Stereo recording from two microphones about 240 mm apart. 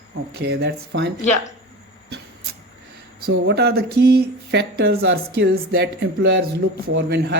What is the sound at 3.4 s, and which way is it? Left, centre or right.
Speech, right.